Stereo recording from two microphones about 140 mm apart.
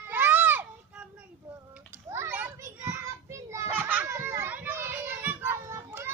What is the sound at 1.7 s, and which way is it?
Children playing, 15° right (ahead or behind).